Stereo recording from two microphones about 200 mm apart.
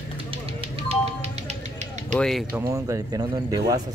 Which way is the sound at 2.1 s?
5° left (ahead or behind).